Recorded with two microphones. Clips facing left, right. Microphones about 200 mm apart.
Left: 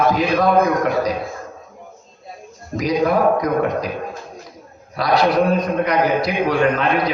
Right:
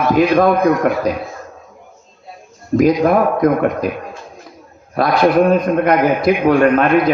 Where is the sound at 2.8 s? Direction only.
50° right (ahead or behind).